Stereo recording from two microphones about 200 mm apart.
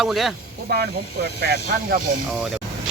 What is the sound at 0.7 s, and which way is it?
Speech, 55° right (ahead or behind).